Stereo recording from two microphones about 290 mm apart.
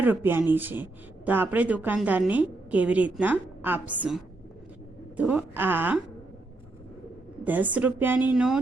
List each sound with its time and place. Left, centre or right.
0.0 s a woman's voice: centre
7.4 s a woman's voice: centre